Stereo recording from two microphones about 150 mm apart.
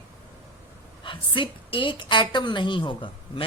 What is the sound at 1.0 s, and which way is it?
Speech, 35° left (ahead or behind).